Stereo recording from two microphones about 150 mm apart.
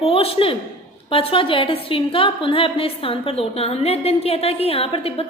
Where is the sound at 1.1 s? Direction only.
35° left (ahead or behind).